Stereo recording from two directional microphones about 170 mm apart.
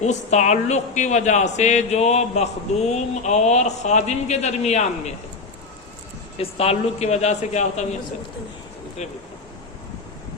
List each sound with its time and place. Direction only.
0.0 s speech: 45° left (ahead or behind)
6.3 s speech: 35° left (ahead or behind)
9.0 s speech: 40° left (ahead or behind)